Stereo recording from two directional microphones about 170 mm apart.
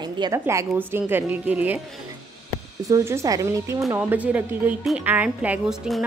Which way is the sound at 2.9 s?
15° right (ahead or behind).